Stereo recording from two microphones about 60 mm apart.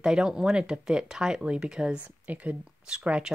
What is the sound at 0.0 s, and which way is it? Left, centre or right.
Speech, centre.